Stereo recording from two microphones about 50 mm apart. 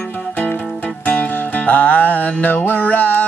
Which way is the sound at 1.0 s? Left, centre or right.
Left.